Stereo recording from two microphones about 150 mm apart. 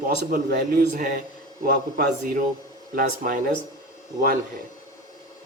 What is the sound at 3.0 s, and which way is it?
Speech, 70° right (ahead or behind).